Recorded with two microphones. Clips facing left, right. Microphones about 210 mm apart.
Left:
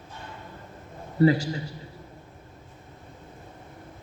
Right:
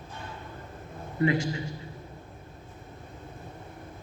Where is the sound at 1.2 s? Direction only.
35° left (ahead or behind).